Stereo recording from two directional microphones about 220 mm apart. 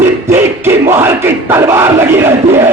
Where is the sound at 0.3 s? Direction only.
10° right (ahead or behind).